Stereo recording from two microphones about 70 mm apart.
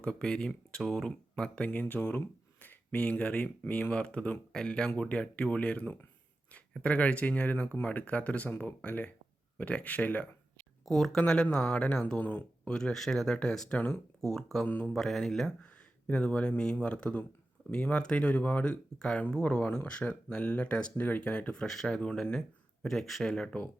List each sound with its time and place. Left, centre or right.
0.0 s speech: centre
10.8 s speech: centre
13.7 s speech: left
14.2 s speech: centre
14.7 s speech: left
14.9 s speech: centre
15.6 s speech: centre